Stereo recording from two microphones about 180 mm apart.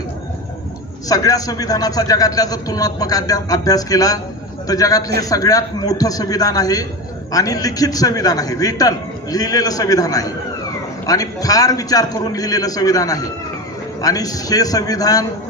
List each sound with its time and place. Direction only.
1.0 s a man's voice: 20° left (ahead or behind)